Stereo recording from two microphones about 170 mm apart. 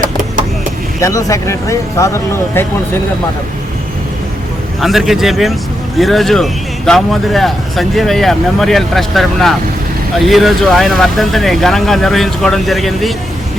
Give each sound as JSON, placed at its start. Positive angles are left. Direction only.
{"t": 1.0, "sound": "speech", "side_deg": 20}
{"t": 4.8, "sound": "speech", "side_deg": 0}